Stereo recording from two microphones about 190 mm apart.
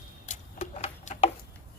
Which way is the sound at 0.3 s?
35° left (ahead or behind).